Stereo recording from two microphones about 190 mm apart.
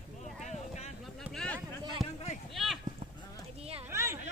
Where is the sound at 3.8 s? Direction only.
15° right (ahead or behind).